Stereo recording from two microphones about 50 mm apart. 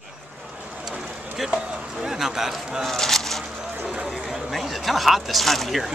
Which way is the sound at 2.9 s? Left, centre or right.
Centre.